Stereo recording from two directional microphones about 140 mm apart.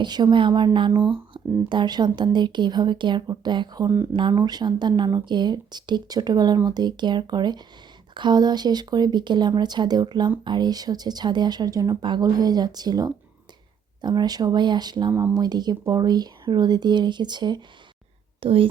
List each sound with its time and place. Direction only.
0.0 s speech: 30° right (ahead or behind)